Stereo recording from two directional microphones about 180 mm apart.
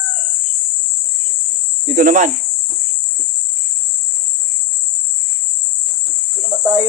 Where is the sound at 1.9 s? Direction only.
45° right (ahead or behind).